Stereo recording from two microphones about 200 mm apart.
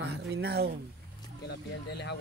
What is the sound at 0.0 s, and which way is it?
Speech, 55° right (ahead or behind).